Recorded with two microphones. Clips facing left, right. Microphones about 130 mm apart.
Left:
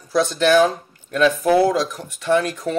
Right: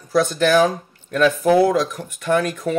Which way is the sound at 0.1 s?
50° right (ahead or behind).